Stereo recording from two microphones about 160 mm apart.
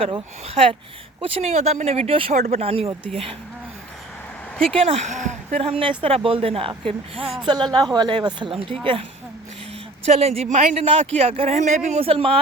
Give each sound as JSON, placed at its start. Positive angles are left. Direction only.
{"t": 0.0, "sound": "speech", "side_deg": -35}
{"t": 4.8, "sound": "speech", "side_deg": -40}
{"t": 10.1, "sound": "speech", "side_deg": -40}